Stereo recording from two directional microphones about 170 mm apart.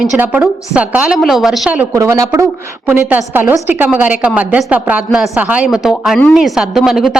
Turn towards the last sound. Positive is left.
turn(degrees=0)  # may be behind; listen again after turning